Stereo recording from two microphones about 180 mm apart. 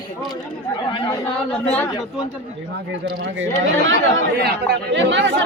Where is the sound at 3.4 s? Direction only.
90° right.